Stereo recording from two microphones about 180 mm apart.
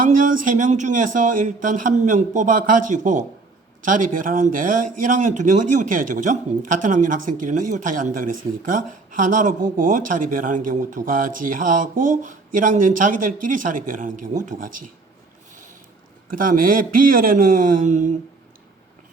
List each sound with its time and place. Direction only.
0.0 s speech: 50° right (ahead or behind)
16.3 s speech: 50° right (ahead or behind)